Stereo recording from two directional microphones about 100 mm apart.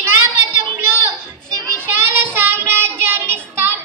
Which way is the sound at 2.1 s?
25° right (ahead or behind).